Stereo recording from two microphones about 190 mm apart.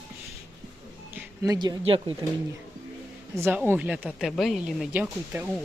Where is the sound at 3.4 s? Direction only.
10° right (ahead or behind).